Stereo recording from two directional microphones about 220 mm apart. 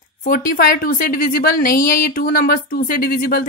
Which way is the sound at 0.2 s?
40° left (ahead or behind).